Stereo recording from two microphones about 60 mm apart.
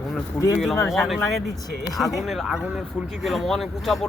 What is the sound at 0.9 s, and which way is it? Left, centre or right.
Speech, centre.